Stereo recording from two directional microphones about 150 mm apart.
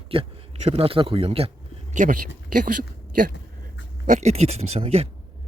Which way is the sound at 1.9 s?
60° right (ahead or behind).